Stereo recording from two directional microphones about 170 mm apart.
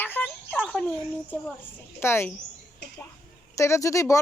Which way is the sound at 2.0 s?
15° left (ahead or behind).